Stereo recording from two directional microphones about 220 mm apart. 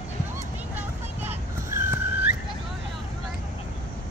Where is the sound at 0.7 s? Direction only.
10° right (ahead or behind).